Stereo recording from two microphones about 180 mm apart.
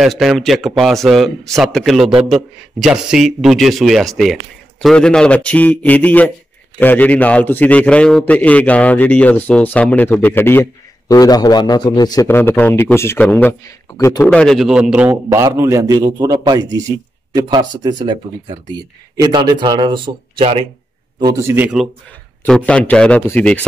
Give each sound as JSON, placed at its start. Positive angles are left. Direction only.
{"t": 0.0, "sound": "a man's voice", "side_deg": 0}
{"t": 14.3, "sound": "a man's voice", "side_deg": 5}
{"t": 21.2, "sound": "speech", "side_deg": -20}
{"t": 22.7, "sound": "a man's voice", "side_deg": 5}